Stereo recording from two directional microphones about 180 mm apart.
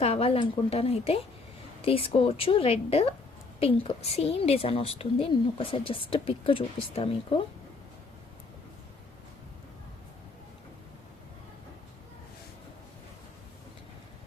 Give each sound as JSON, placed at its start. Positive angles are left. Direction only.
{"t": 0.0, "sound": "a woman's voice", "side_deg": 35}